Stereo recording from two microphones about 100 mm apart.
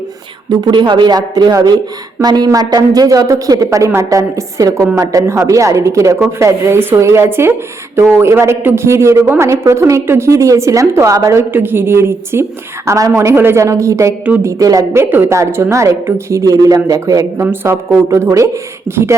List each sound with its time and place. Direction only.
0.5 s a woman's voice: 50° right (ahead or behind)
15.1 s a woman's voice: 25° right (ahead or behind)
17.4 s a woman's voice: 20° right (ahead or behind)